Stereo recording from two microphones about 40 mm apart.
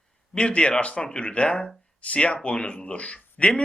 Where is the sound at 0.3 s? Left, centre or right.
Left.